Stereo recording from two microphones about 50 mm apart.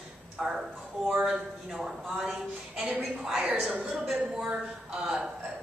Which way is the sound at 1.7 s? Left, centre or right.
Centre.